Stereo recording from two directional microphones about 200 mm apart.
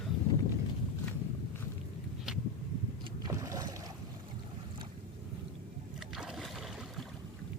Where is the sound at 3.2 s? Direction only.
15° right (ahead or behind).